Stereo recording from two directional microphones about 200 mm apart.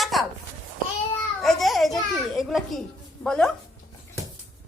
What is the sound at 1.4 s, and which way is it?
Speech, centre (ahead or behind).